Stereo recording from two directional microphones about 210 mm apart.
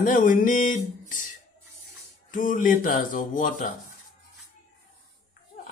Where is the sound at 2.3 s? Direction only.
40° left (ahead or behind).